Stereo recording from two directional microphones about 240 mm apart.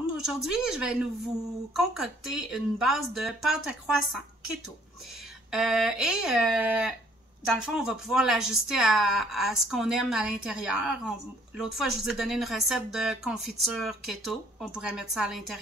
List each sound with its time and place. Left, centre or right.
0.2 s speech: centre
5.5 s speech: centre